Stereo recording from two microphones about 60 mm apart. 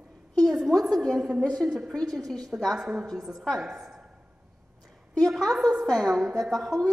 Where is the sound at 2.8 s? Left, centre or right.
Centre.